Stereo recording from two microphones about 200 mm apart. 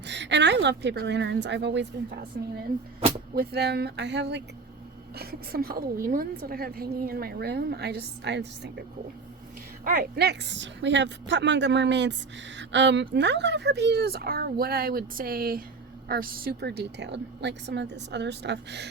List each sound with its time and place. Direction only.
0.0 s a woman's voice: 60° right (ahead or behind)
5.1 s a woman's voice: 50° right (ahead or behind)
9.8 s a woman's voice: 50° right (ahead or behind)